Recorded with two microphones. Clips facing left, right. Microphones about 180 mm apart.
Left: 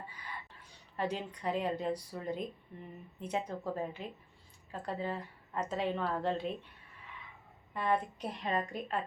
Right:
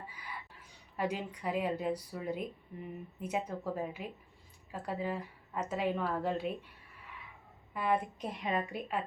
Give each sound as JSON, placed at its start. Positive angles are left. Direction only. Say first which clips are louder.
{"t": 0.1, "sound": "a sound", "louder": "even", "side_deg": -10}
{"t": 0.9, "sound": "a woman's voice", "louder": "right 1 dB", "side_deg": -10}
{"t": 7.7, "sound": "a woman's voice", "louder": "even", "side_deg": -10}